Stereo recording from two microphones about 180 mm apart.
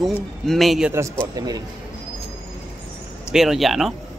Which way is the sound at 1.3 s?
20° right (ahead or behind).